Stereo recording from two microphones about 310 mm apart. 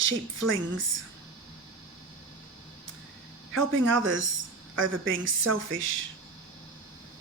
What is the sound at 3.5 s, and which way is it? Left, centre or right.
Speech, right.